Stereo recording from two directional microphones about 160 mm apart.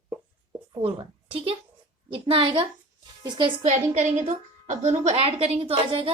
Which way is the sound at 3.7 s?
45° right (ahead or behind).